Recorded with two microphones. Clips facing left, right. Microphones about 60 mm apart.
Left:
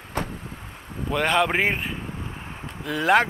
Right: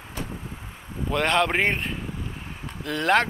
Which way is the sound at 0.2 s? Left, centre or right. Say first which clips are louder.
Left 6 dB; left.